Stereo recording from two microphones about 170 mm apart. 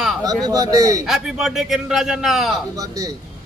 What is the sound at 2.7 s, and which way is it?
Speech, 20° right (ahead or behind).